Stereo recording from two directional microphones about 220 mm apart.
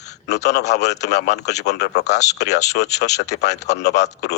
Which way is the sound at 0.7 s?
50° left (ahead or behind).